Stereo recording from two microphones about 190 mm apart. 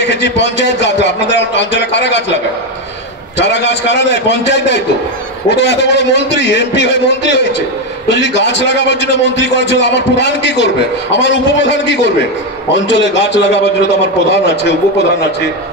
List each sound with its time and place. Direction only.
0.0 s a man's voice: 65° left (ahead or behind)
3.3 s a man's voice: 65° left (ahead or behind)